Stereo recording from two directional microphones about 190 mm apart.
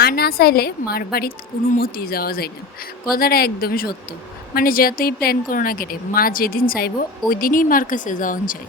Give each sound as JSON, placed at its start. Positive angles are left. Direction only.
{"t": 0.0, "sound": "a woman's voice", "side_deg": 55}